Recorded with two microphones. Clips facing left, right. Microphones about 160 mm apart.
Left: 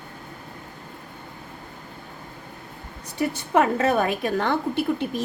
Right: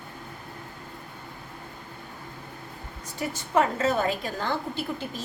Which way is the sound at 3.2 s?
60° left (ahead or behind).